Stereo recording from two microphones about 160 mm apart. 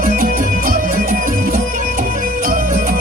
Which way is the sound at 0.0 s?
60° right (ahead or behind).